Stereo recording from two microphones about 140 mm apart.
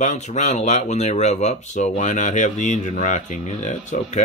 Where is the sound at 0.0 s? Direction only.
60° left (ahead or behind).